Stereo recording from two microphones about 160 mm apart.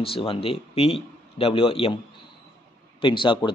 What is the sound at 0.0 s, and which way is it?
Speech, 35° left (ahead or behind).